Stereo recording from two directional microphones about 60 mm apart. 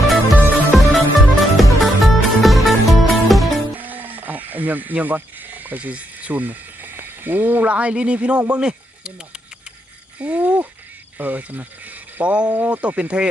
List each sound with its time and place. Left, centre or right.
0.7 s music: centre
3.8 s a sound: right
8.4 s speech: centre